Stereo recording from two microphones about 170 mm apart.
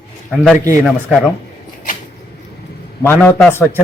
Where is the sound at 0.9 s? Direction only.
5° left (ahead or behind).